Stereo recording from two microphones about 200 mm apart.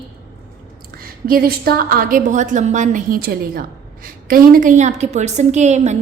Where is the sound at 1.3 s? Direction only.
50° right (ahead or behind).